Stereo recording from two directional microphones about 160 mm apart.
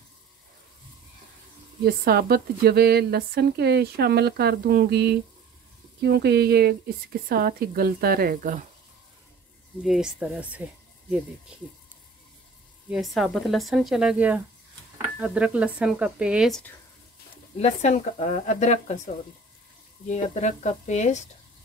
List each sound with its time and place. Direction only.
1.9 s speech: 75° right (ahead or behind); by 8.6 s 55° right (ahead or behind)
9.8 s speech: 5° right (ahead or behind)
12.9 s speech: centre (ahead or behind)
17.6 s speech: 45° left (ahead or behind)